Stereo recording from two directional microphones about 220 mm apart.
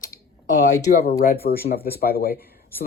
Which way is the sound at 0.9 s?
45° left (ahead or behind).